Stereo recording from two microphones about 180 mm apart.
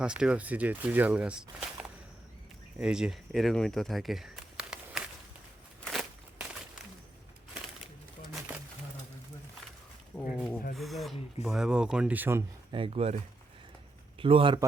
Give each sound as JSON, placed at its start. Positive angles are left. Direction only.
{"t": 0.0, "sound": "speech", "side_deg": -5}
{"t": 5.8, "sound": "a sound", "side_deg": 0}
{"t": 10.2, "sound": "a sound", "side_deg": 5}
{"t": 11.4, "sound": "speech", "side_deg": -5}
{"t": 12.7, "sound": "speech", "side_deg": -30}
{"t": 14.2, "sound": "speech", "side_deg": -30}